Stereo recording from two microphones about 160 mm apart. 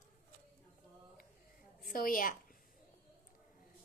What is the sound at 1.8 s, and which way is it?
Speech, 60° left (ahead or behind).